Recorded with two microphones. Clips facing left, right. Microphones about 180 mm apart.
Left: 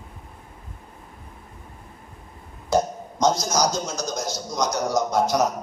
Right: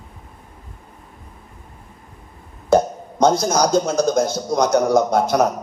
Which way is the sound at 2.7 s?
55° right (ahead or behind).